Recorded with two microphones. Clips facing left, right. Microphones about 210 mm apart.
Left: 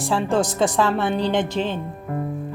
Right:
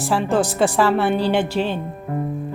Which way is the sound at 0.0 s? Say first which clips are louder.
Right 1 dB; 5° right (ahead or behind).